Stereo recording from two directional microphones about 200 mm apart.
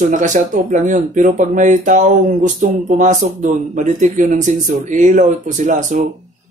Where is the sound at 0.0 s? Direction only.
40° right (ahead or behind).